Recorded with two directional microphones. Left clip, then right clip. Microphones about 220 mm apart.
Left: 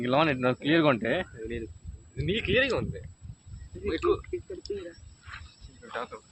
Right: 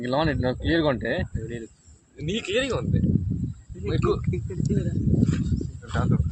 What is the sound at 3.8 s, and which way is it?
Speech, 50° right (ahead or behind).